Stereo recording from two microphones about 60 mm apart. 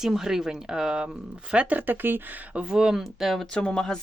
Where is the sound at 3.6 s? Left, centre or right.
Centre.